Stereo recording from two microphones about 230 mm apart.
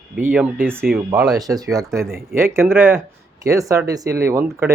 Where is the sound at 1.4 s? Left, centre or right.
Centre.